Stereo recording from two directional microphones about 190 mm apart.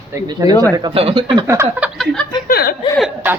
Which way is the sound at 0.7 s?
25° right (ahead or behind).